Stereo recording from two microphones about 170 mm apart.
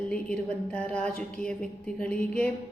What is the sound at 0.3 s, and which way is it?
A woman's voice, 5° left (ahead or behind).